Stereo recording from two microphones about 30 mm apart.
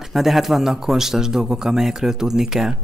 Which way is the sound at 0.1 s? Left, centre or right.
Centre.